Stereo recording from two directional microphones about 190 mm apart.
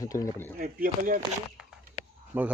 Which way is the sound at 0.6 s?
50° right (ahead or behind).